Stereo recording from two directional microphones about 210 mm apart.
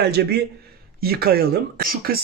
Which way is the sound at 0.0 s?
50° right (ahead or behind).